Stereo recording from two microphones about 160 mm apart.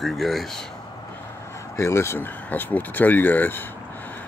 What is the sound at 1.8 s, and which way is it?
Speech, 15° left (ahead or behind).